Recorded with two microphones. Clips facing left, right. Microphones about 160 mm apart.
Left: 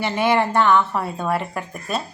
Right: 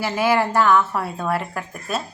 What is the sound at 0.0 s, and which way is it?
Speech, 5° right (ahead or behind).